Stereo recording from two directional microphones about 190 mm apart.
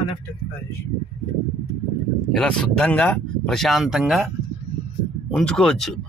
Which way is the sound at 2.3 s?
5° left (ahead or behind).